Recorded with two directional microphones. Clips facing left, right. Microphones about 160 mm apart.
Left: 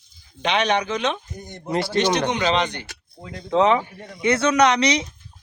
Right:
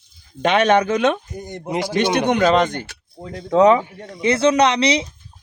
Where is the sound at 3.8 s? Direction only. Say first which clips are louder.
Right 2 dB; 25° right (ahead or behind).